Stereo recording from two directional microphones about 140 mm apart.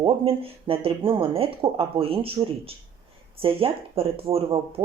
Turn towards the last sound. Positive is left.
turn(degrees=-45)  # may be behind; listen again after turning